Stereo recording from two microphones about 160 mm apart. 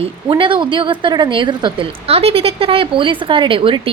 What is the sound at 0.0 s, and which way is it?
A woman's voice, 30° right (ahead or behind).